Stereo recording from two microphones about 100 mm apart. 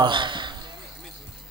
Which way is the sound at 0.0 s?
55° right (ahead or behind).